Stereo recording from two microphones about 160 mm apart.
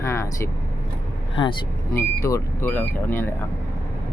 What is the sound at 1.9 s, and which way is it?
Speech, 20° left (ahead or behind).